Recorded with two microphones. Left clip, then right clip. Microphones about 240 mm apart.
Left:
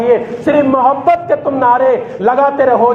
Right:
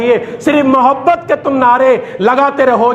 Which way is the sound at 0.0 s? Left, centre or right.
Right.